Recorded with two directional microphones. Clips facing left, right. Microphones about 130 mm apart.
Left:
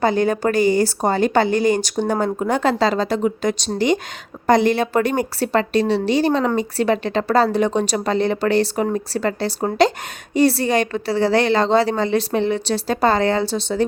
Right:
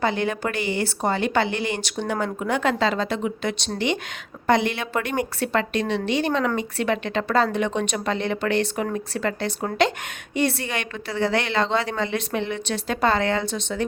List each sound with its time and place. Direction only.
0.0 s speech: 40° left (ahead or behind)